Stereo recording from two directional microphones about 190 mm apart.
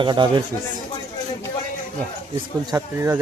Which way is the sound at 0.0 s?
25° right (ahead or behind).